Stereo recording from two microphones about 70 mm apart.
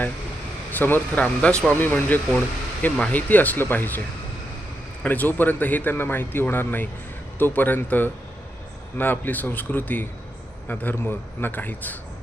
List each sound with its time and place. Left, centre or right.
0.7 s speech: left
1.2 s speech: centre
1.7 s speech: left
5.0 s speech: left